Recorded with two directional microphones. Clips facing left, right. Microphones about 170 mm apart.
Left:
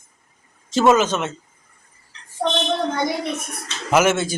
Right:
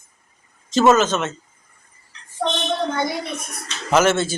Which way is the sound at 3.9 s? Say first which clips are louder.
Even; 10° left (ahead or behind).